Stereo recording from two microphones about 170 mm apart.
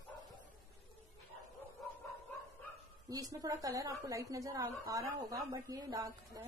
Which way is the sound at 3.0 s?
20° right (ahead or behind).